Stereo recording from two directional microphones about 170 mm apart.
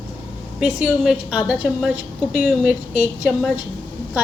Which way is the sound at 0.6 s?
5° right (ahead or behind).